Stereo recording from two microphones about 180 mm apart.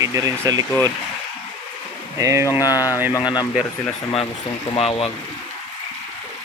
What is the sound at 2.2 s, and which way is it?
Speech, 15° right (ahead or behind).